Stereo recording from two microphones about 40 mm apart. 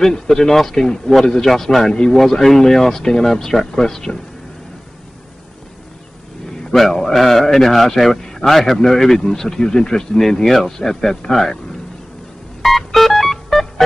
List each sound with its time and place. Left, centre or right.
0.0 s a man's voice: centre
6.6 s a man's voice: centre
12.6 s music: centre